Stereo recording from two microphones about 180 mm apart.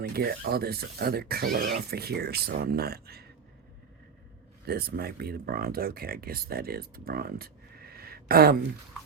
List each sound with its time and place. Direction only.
0.0 s speech: 60° right (ahead or behind)
4.6 s speech: 60° right (ahead or behind)